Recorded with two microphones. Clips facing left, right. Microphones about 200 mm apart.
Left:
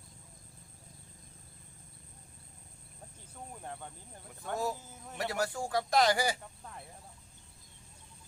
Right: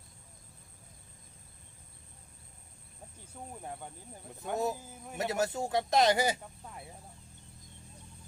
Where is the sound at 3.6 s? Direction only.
10° right (ahead or behind).